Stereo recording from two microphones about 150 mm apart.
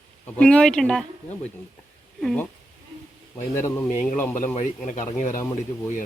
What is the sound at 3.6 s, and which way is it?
Speech, 15° left (ahead or behind).